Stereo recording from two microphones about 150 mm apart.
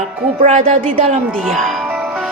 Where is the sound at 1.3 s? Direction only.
Centre (ahead or behind).